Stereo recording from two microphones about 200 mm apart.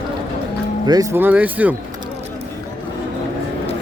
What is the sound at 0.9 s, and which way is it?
Speech, 15° right (ahead or behind).